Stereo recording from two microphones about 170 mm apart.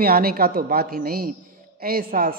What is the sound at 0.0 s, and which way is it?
A man's voice, 60° right (ahead or behind).